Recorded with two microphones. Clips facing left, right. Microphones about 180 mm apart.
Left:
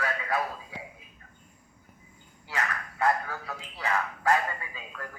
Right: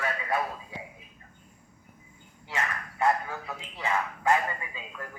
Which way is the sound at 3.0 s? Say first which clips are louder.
Right 1 dB; 15° right (ahead or behind).